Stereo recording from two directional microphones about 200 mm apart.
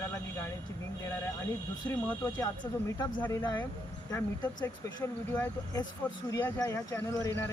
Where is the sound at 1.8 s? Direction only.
10° left (ahead or behind).